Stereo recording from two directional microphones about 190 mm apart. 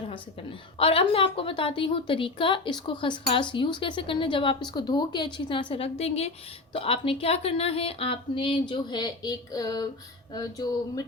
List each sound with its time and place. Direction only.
0.8 s a woman's voice: 30° left (ahead or behind)